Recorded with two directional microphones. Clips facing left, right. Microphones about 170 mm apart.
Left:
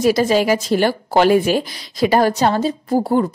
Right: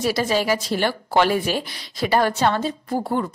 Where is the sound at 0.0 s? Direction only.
45° left (ahead or behind).